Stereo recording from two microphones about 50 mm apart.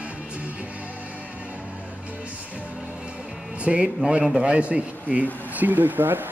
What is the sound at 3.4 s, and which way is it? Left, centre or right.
Speech, right.